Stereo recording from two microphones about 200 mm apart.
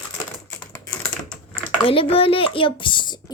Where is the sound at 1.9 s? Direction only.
30° left (ahead or behind).